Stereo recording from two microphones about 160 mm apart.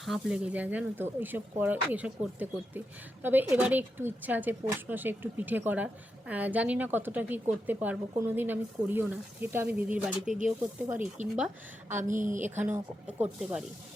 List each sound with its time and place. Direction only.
0.0 s a woman's voice: 5° right (ahead or behind)
10.2 s a woman's voice: 55° right (ahead or behind)
10.6 s a woman's voice: 10° right (ahead or behind)
12.0 s a woman's voice: 55° right (ahead or behind)
12.4 s a woman's voice: 10° right (ahead or behind)